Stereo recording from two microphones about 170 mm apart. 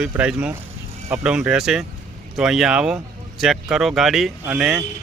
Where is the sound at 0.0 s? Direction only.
5° right (ahead or behind).